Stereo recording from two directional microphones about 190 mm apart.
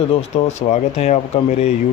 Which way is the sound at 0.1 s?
35° left (ahead or behind).